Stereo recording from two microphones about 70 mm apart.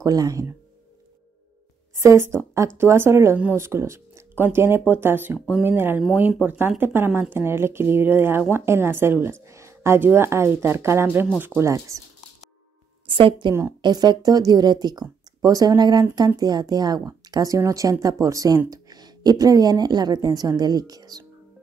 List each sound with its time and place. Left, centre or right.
0.0 s speech: right
2.0 s speech: right
11.6 s speech: right
13.7 s speech: right
16.3 s speech: right
18.7 s a woman's voice: right